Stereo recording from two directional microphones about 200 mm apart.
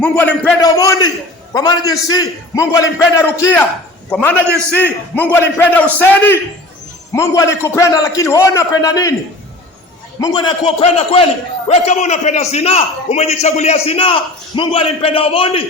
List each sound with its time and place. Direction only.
0.0 s a man's voice: 5° left (ahead or behind)
0.6 s a man's voice: 15° left (ahead or behind)
10.2 s a man's voice: 20° left (ahead or behind)